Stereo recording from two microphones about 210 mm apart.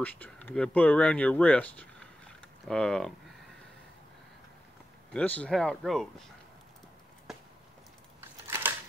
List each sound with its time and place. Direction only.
0.0 s speech: 5° left (ahead or behind)
5.1 s speech: 5° left (ahead or behind)
8.2 s typewriter: 10° right (ahead or behind)